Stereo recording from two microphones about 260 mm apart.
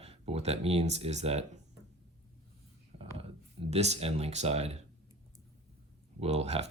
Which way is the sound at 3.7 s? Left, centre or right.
Right.